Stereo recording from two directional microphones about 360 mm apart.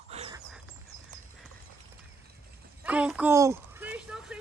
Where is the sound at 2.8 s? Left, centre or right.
Centre.